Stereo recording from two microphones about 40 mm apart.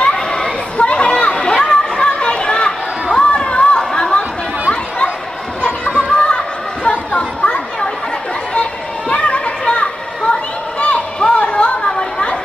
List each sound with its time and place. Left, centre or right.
0.1 s chatter: centre
0.7 s chatter: left
1.4 s a sound: centre
4.6 s chatter: left
5.6 s a sound: left
7.1 s children playing: left
9.1 s children playing: left
10.8 s chatter: left